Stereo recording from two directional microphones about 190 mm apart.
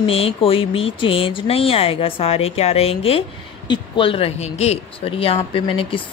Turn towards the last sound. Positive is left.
turn(degrees=30)  # may be behind; listen again after turning